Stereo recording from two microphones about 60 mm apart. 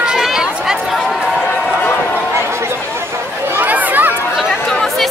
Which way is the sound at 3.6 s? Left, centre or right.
Right.